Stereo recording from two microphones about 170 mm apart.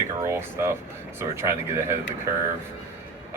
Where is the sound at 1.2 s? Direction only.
15° right (ahead or behind).